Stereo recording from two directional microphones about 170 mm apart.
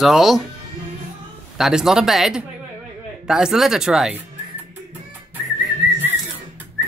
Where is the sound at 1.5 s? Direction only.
Centre (ahead or behind).